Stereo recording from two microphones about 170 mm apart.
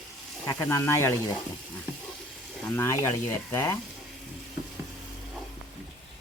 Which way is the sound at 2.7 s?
15° left (ahead or behind).